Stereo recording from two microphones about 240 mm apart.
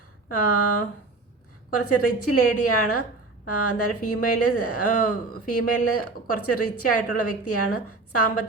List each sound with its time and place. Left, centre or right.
0.3 s speech: left
1.9 s speech: left